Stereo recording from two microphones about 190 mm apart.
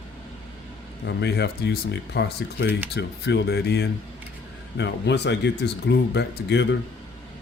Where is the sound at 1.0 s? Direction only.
60° left (ahead or behind).